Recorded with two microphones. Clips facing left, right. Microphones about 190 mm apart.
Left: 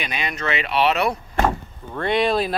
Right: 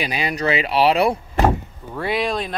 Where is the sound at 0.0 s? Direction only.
35° right (ahead or behind).